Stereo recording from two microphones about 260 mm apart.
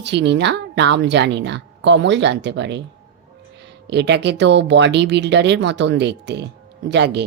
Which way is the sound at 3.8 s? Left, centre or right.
Right.